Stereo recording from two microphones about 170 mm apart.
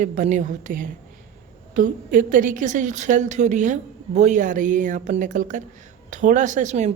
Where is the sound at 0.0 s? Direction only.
50° right (ahead or behind).